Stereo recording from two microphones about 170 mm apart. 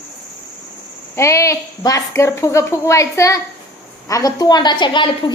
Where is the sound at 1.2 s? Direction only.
15° left (ahead or behind).